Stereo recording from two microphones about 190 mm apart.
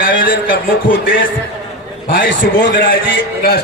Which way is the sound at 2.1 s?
50° left (ahead or behind).